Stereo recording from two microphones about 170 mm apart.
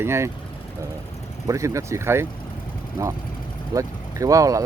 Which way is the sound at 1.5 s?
15° right (ahead or behind).